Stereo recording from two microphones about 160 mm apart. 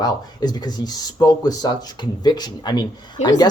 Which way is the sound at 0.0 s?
25° left (ahead or behind).